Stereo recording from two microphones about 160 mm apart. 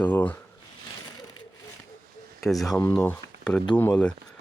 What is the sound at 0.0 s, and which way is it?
Speech, 10° left (ahead or behind).